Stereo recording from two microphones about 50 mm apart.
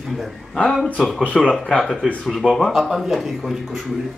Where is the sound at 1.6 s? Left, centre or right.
Centre.